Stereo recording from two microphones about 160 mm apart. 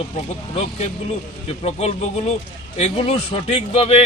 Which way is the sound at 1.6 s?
40° left (ahead or behind).